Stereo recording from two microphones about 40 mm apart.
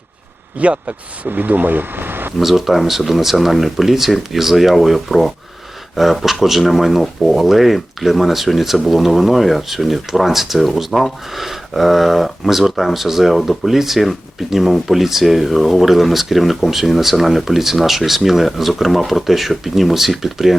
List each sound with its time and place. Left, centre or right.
0.6 s speech: right
1.3 s speech: right
2.4 s speech: centre